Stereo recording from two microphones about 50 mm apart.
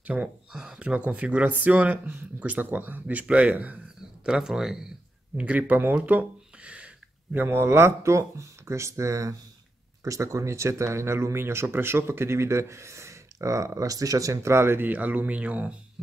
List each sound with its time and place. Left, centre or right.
0.0 s speech: right
0.5 s speech: centre
0.8 s speech: right
4.2 s speech: centre
5.4 s speech: right
6.0 s a sound: right
7.4 s speech: right
14.2 s speech: right
14.9 s speech: right